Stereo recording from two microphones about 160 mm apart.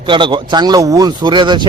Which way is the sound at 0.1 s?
30° right (ahead or behind).